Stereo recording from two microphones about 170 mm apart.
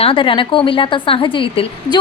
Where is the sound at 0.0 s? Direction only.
30° left (ahead or behind).